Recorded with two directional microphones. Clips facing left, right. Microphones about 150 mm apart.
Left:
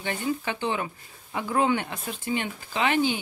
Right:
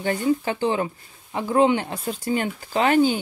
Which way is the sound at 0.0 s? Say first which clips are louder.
Right 7 dB; 35° right (ahead or behind).